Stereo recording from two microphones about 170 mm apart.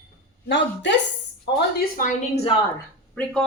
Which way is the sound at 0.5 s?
90° left.